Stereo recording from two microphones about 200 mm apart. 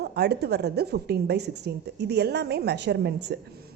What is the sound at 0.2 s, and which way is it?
A woman's voice, 55° right (ahead or behind).